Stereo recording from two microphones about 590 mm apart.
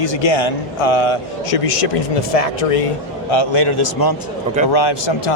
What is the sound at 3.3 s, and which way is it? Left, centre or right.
A man's voice, left.